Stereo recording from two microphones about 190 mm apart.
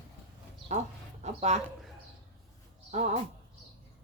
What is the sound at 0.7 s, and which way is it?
Speech, 35° right (ahead or behind).